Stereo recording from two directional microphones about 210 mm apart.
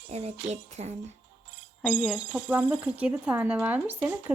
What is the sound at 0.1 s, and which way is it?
Speech, 30° right (ahead or behind).